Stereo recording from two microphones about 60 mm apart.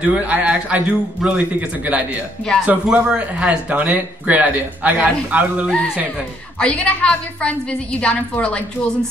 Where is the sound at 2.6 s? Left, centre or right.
Centre.